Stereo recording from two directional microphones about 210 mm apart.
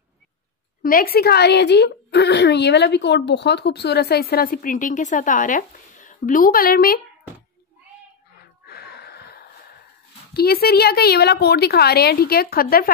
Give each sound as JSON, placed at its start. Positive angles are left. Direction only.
{"t": 0.8, "sound": "a woman's voice", "side_deg": 45}
{"t": 8.4, "sound": "gasp", "side_deg": 50}
{"t": 10.3, "sound": "a woman's voice", "side_deg": 45}